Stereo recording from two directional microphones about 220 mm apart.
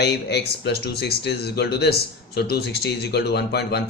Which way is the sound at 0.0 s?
50° left (ahead or behind).